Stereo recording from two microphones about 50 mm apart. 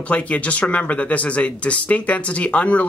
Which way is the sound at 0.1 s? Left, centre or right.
Left.